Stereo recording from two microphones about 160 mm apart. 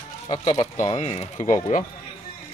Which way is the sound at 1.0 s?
40° left (ahead or behind).